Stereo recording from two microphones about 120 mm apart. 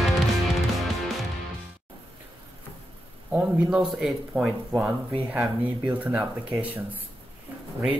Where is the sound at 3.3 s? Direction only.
5° right (ahead or behind).